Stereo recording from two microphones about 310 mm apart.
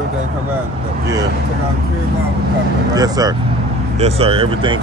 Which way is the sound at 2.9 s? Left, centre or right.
Centre.